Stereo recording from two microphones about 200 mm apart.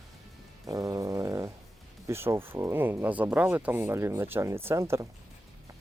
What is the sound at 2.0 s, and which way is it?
Speech, 15° right (ahead or behind).